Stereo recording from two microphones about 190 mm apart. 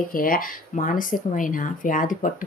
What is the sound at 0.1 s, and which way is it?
Speech, 50° left (ahead or behind).